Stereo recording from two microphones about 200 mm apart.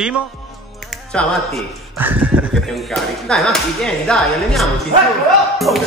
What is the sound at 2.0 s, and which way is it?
Speech, 10° right (ahead or behind).